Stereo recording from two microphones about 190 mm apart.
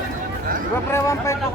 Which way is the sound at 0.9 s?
15° left (ahead or behind).